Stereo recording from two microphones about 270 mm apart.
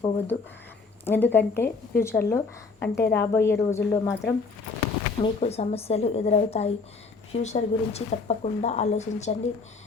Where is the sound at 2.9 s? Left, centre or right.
Left.